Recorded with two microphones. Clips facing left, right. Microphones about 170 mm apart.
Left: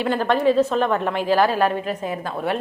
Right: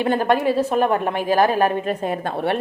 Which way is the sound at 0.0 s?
15° right (ahead or behind).